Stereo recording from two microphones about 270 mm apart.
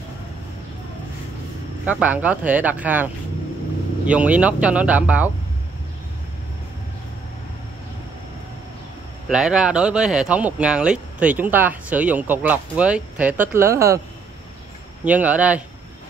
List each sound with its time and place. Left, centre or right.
1.9 s speech: centre
9.3 s speech: centre
15.0 s speech: centre